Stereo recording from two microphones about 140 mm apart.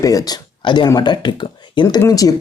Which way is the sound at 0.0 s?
25° left (ahead or behind).